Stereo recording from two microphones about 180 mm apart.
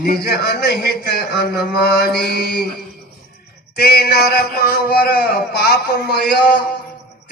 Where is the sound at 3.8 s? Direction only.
55° left (ahead or behind).